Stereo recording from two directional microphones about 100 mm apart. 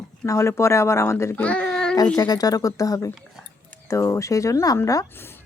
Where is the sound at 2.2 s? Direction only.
40° left (ahead or behind).